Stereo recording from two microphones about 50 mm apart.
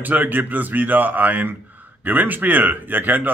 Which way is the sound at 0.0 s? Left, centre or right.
Right.